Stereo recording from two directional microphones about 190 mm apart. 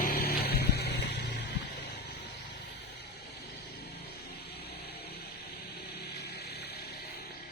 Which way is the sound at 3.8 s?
55° left (ahead or behind).